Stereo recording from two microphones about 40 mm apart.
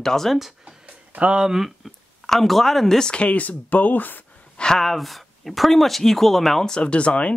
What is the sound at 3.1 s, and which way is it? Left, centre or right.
Speech, left.